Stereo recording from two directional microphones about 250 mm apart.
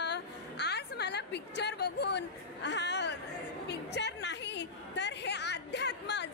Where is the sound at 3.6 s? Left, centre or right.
Left.